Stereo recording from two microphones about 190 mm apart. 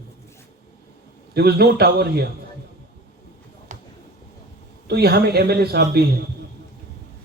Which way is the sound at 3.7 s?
40° right (ahead or behind).